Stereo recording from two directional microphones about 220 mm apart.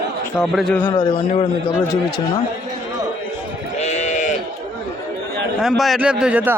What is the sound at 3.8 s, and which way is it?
Sheep, 30° left (ahead or behind).